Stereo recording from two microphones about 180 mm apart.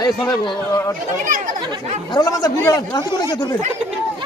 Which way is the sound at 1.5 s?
25° right (ahead or behind).